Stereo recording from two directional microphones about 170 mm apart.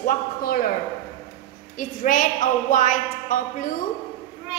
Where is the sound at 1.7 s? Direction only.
50° left (ahead or behind).